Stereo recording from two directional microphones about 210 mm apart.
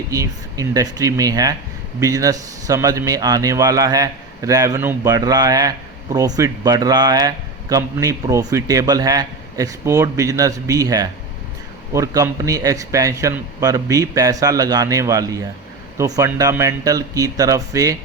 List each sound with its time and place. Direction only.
0.1 s a man's voice: 15° right (ahead or behind)